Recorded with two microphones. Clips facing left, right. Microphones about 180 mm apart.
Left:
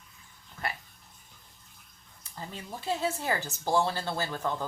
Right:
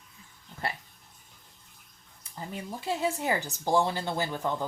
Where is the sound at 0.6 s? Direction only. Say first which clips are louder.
Right 2 dB; 30° right (ahead or behind).